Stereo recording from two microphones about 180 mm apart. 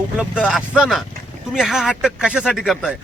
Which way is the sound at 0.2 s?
5° right (ahead or behind).